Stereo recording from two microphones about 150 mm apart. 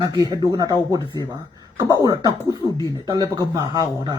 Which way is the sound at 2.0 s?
25° right (ahead or behind).